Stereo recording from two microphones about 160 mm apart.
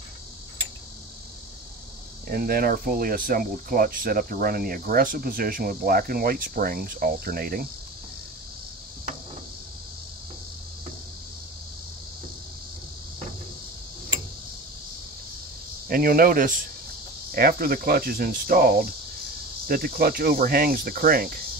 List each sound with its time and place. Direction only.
2.2 s speech: 65° right (ahead or behind)
15.9 s speech: 65° right (ahead or behind)
17.3 s cricket: 70° right (ahead or behind)